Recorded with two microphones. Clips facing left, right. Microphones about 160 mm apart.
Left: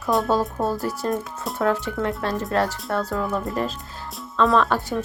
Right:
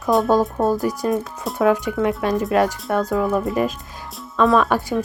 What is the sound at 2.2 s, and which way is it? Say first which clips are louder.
Speech: right 5 dB; 15° right (ahead or behind).